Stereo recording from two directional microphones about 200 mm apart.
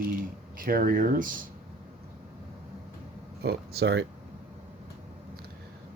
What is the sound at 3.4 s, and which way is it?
Speech, 55° right (ahead or behind).